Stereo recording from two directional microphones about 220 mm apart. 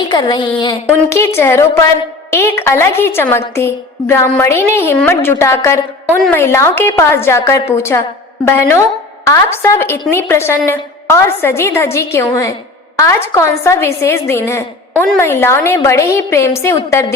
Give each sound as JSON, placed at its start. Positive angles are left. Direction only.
{"t": 0.1, "sound": "a woman's voice", "side_deg": 20}